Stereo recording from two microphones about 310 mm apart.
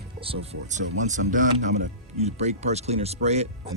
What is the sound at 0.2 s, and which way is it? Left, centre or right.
Speech, centre.